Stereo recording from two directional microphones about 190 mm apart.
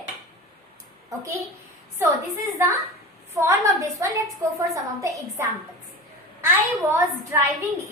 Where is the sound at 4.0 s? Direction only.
15° right (ahead or behind).